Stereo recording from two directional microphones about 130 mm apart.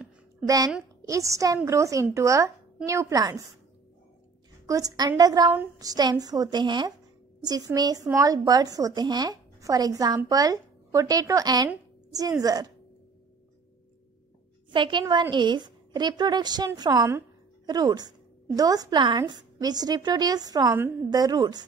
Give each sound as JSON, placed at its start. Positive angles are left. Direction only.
{"t": 1.0, "sound": "speech", "side_deg": -25}
{"t": 4.6, "sound": "a woman's voice", "side_deg": -25}
{"t": 14.7, "sound": "a woman's voice", "side_deg": -40}